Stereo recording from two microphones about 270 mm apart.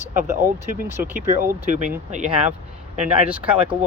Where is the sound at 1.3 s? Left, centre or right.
Right.